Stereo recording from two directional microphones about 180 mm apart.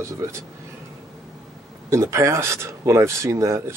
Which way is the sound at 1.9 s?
15° right (ahead or behind).